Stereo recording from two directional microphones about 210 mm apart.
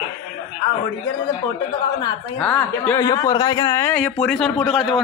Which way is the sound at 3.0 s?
15° left (ahead or behind).